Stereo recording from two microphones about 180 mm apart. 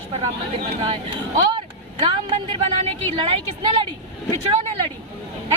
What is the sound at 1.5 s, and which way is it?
Vehicle, 30° right (ahead or behind).